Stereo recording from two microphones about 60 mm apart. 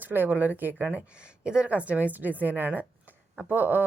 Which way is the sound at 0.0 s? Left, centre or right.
Right.